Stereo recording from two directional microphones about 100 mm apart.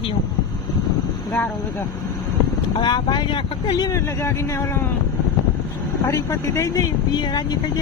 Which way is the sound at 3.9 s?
25° left (ahead or behind).